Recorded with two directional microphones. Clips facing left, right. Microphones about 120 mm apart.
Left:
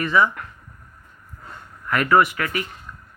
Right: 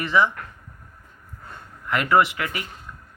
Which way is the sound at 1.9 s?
20° right (ahead or behind).